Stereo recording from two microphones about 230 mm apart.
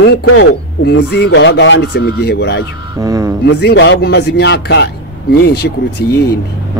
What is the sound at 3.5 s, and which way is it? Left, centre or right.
Speech, left.